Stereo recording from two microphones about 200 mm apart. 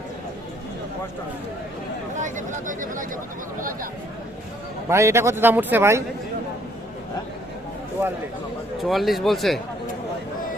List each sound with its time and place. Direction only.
2.1 s a sound: 40° right (ahead or behind)
3.6 s speech: 45° right (ahead or behind)
4.9 s a man's voice: 15° right (ahead or behind)
8.8 s speech: centre (ahead or behind)